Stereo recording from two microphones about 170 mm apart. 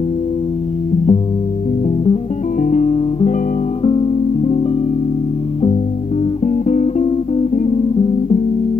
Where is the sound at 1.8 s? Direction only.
35° left (ahead or behind).